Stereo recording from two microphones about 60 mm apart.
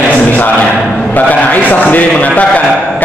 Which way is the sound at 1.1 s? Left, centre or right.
Left.